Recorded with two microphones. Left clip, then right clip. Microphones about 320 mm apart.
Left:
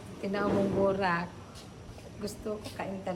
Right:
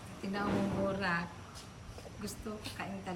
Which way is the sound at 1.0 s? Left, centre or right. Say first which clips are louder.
Left 5 dB; centre.